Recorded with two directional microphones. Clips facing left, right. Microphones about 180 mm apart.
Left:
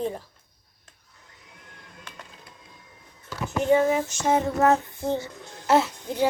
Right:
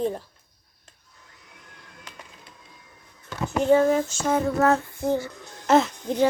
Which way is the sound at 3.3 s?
20° right (ahead or behind).